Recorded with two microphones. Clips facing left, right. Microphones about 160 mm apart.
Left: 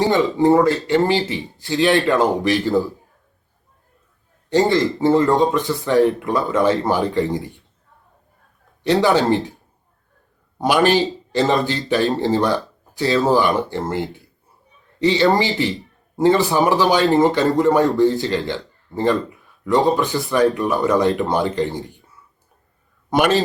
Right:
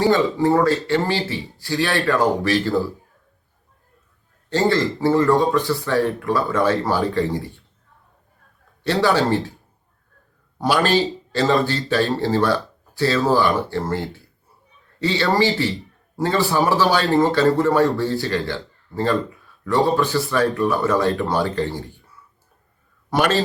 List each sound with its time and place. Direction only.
0.0 s a man's voice: 20° left (ahead or behind)
4.4 s a man's voice: 15° left (ahead or behind)
8.8 s a man's voice: 20° left (ahead or behind)
10.6 s a man's voice: 20° left (ahead or behind)
23.0 s a man's voice: 20° left (ahead or behind)